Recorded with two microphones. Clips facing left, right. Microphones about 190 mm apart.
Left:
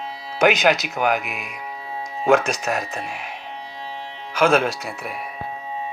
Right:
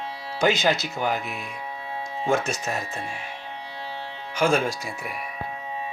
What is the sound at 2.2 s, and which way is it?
Speech, 65° left (ahead or behind).